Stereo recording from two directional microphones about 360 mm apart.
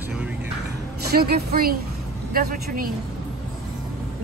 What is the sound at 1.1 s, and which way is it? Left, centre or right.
A woman's voice, right.